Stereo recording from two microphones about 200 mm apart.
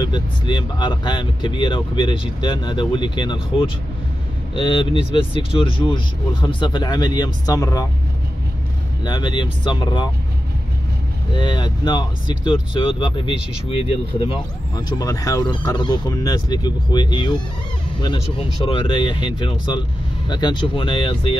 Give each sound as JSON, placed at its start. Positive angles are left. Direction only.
{"t": 0.0, "sound": "speech", "side_deg": 25}
{"t": 9.0, "sound": "speech", "side_deg": 20}
{"t": 11.3, "sound": "speech", "side_deg": 20}